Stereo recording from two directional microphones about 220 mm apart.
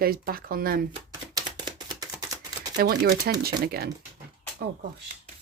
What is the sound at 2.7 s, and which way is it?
A woman's voice, 40° right (ahead or behind).